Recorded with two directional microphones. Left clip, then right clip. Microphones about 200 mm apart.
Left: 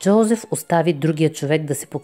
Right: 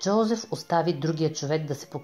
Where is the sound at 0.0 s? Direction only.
35° left (ahead or behind).